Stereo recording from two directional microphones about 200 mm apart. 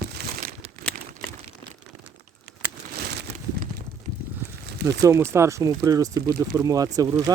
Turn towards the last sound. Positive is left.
turn(degrees=-20)  # may be behind; listen again after turning